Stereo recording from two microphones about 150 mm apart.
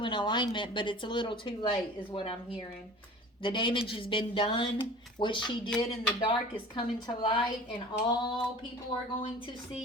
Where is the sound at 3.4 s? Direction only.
35° left (ahead or behind).